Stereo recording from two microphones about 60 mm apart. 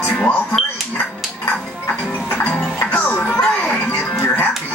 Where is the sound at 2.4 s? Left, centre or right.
Left.